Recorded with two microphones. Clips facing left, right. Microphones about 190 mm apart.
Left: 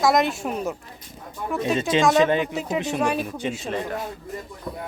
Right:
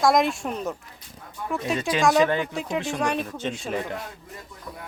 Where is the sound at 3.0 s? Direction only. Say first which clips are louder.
Left 2 dB; 5° left (ahead or behind).